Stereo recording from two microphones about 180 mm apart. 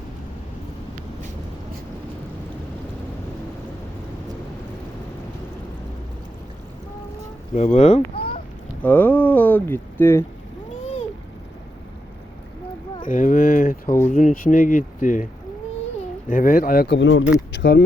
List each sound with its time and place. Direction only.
7.5 s speech: 40° left (ahead or behind)
8.8 s speech: 10° left (ahead or behind)
13.1 s speech: 45° left (ahead or behind)
16.3 s speech: 50° left (ahead or behind); by 17.8 s 80° left